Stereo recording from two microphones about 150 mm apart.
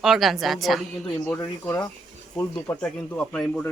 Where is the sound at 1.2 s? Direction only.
15° left (ahead or behind).